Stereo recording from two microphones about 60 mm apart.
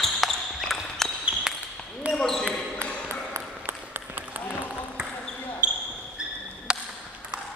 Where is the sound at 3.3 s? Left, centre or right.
Right.